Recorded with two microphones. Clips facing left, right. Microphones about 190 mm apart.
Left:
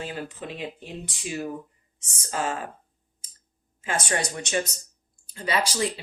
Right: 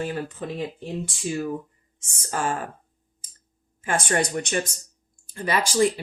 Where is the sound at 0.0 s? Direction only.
45° right (ahead or behind).